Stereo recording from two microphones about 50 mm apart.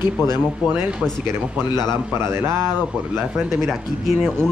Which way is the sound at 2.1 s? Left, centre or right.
Right.